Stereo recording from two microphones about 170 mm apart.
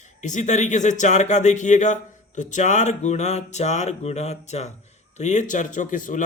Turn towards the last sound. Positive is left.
turn(degrees=50)  # may be behind; listen again after turning